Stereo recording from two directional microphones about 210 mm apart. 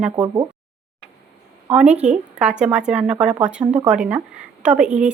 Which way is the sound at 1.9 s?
30° right (ahead or behind).